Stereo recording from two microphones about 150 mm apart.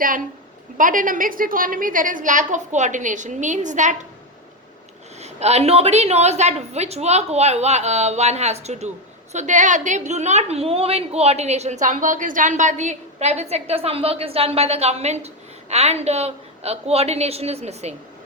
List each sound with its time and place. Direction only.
0.8 s a woman's voice: 65° right (ahead or behind)
5.2 s a woman's voice: 45° right (ahead or behind)